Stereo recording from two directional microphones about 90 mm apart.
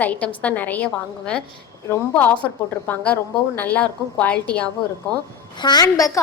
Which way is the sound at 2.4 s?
15° left (ahead or behind).